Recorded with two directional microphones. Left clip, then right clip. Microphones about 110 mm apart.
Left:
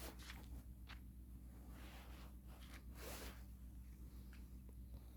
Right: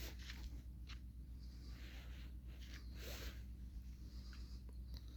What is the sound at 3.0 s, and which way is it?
Snort, 35° left (ahead or behind).